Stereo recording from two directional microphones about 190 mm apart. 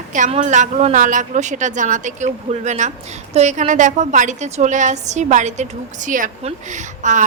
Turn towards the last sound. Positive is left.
turn(degrees=-40)  # may be behind; listen again after turning